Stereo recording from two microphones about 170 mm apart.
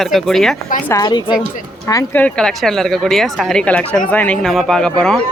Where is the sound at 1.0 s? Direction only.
25° left (ahead or behind).